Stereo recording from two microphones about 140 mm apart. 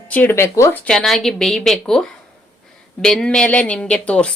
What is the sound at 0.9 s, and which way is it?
A woman's voice, 5° left (ahead or behind).